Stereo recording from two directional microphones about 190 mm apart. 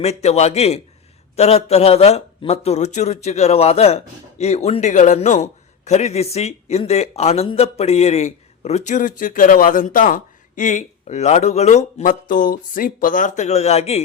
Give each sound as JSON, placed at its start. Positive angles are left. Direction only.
{"t": 0.0, "sound": "a man's voice", "side_deg": 35}